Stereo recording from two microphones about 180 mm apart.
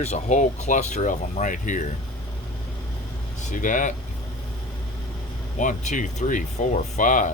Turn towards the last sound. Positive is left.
turn(degrees=45)  # may be behind; listen again after turning